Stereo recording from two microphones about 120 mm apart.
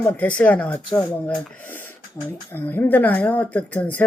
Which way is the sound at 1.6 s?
15° left (ahead or behind).